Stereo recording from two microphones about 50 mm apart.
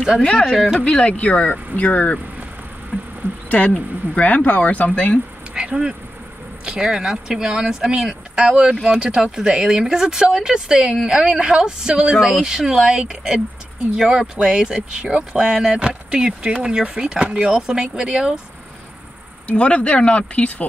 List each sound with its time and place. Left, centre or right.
0.2 s speech: centre
0.5 s speech: centre
0.8 s speech: left
3.4 s speech: left
5.5 s insect: centre
6.6 s speech: centre
19.4 s speech: left